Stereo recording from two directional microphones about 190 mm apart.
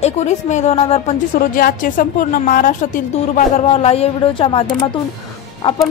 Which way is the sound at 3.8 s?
30° left (ahead or behind).